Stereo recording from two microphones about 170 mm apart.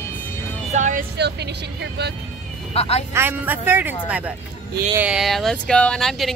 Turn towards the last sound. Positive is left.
turn(degrees=0)  # may be behind; listen again after turning